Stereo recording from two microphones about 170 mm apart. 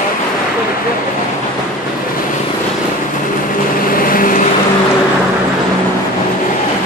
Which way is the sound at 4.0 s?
55° left (ahead or behind).